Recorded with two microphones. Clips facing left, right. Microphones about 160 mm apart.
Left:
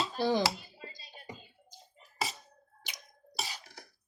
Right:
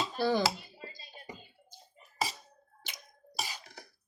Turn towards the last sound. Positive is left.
turn(degrees=15)  # may be behind; listen again after turning